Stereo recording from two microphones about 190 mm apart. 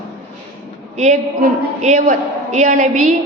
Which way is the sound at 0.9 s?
40° right (ahead or behind).